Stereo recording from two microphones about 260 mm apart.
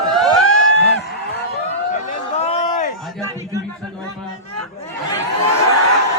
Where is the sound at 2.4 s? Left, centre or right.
Left.